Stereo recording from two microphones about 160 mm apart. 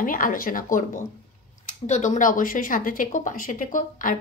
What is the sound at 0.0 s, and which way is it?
A woman's voice, 60° left (ahead or behind).